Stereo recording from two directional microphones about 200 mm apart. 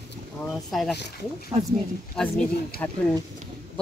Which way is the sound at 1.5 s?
30° right (ahead or behind).